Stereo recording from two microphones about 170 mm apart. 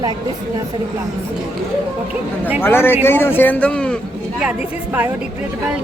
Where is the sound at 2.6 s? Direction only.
15° left (ahead or behind).